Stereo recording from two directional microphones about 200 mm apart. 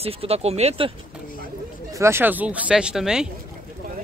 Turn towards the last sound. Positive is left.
turn(degrees=-5)  # may be behind; listen again after turning